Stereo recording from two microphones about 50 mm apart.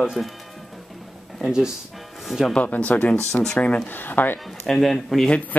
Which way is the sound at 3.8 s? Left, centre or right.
Left.